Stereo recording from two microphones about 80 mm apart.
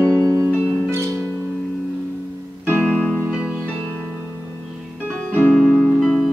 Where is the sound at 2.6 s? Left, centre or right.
Right.